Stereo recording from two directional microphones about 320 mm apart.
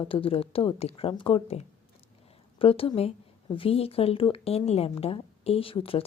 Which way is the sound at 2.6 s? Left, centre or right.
Centre.